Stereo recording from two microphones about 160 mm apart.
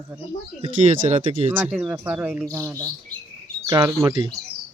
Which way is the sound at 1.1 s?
50° right (ahead or behind).